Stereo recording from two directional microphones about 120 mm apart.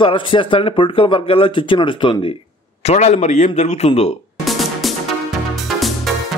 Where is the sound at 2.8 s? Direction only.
70° left (ahead or behind).